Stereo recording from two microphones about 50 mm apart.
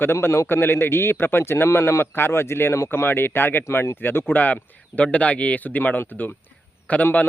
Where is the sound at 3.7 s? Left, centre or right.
Left.